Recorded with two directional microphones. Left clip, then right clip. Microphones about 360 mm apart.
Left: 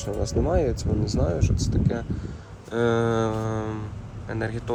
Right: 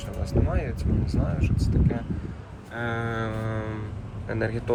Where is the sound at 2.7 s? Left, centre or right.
Centre.